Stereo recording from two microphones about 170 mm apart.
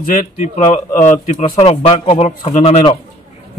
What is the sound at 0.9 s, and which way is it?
A man's voice, 45° left (ahead or behind).